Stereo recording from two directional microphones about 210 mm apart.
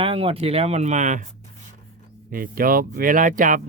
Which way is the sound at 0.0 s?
25° right (ahead or behind).